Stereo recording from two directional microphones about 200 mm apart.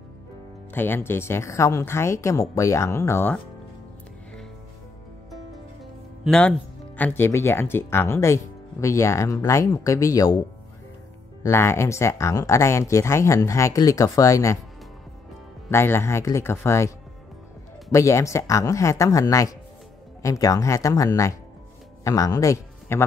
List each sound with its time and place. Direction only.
0.7 s speech: 10° left (ahead or behind)
6.2 s a man's voice: 5° left (ahead or behind)
11.4 s speech: 15° left (ahead or behind)
15.7 s speech: 10° left (ahead or behind)
17.9 s speech: 15° left (ahead or behind)